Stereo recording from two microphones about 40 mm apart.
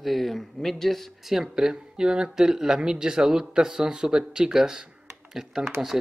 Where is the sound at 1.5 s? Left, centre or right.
Centre.